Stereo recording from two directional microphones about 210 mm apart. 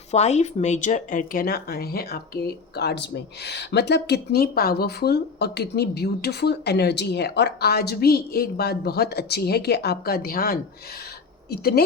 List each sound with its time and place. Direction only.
0.1 s a woman's voice: 30° left (ahead or behind); by 11.9 s 50° left (ahead or behind)